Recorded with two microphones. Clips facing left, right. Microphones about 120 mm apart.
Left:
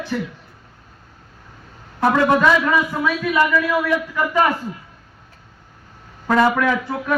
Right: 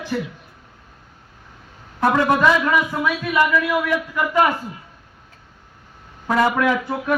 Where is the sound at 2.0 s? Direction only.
5° right (ahead or behind).